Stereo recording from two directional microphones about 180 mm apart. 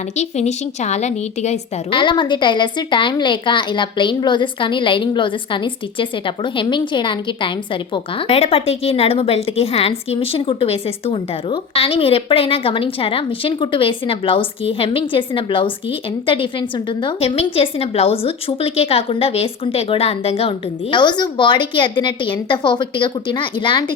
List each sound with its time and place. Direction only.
0.2 s a woman's voice: 40° left (ahead or behind)